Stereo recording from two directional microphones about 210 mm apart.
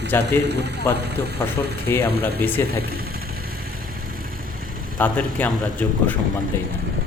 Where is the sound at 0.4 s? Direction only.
50° right (ahead or behind).